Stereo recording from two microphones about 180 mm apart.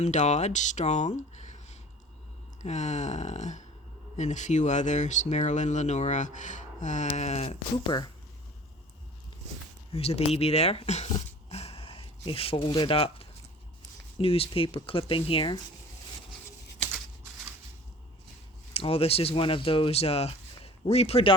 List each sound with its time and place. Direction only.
0.0 s speech: 40° left (ahead or behind)
9.9 s speech: 35° left (ahead or behind)
11.1 s a sound: 35° left (ahead or behind)
14.2 s speech: 30° left (ahead or behind)
18.7 s speech: 35° left (ahead or behind)